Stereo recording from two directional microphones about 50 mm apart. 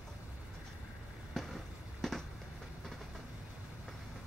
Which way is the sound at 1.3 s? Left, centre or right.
Centre.